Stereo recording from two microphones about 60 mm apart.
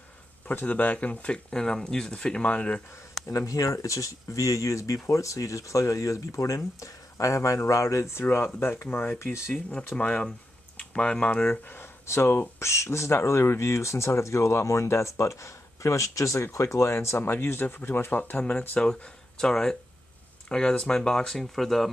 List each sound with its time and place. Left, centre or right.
0.5 s speech: left
3.3 s speech: left
9.2 s speech: left
9.9 s speech: centre
12.1 s speech: left
18.8 s speech: centre